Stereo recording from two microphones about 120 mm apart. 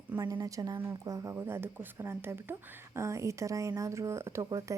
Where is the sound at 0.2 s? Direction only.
30° right (ahead or behind).